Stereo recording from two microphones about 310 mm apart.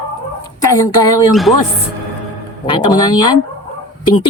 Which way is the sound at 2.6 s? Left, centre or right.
Centre.